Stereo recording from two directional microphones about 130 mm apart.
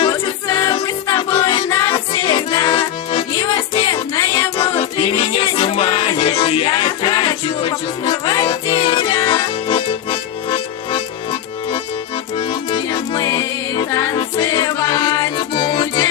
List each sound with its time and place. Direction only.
0.1 s music: 25° left (ahead or behind)
1.3 s music: 40° left (ahead or behind)
4.1 s music: 25° left (ahead or behind)
4.5 s music: 40° left (ahead or behind)